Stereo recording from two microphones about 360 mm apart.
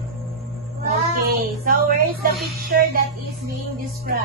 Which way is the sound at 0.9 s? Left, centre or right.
Right.